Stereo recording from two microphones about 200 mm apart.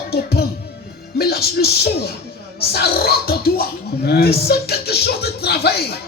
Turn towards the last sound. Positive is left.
turn(degrees=55)  # may be behind; listen again after turning